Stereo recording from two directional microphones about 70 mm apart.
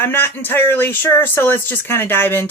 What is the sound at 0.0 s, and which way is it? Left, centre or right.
Speech, left.